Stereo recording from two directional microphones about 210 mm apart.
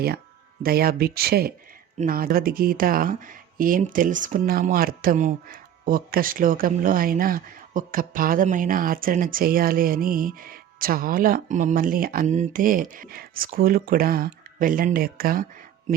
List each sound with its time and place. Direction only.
0.6 s speech: 45° right (ahead or behind)